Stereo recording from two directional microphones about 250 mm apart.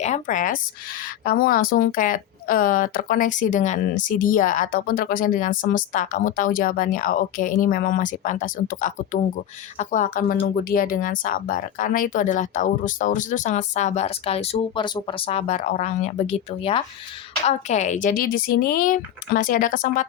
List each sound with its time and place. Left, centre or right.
0.0 s speech: left